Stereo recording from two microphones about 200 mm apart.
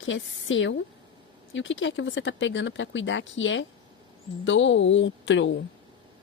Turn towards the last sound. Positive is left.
turn(degrees=65)  # may be behind; listen again after turning